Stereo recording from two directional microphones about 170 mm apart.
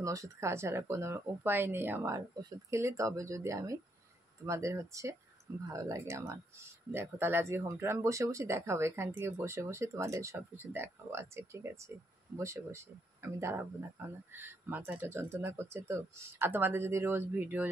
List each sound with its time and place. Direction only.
0.0 s speech: 20° right (ahead or behind)